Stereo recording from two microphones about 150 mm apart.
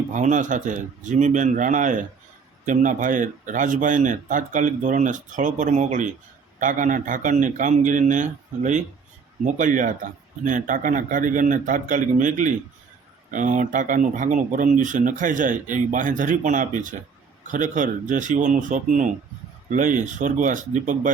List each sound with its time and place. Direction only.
0.1 s speech: 55° right (ahead or behind)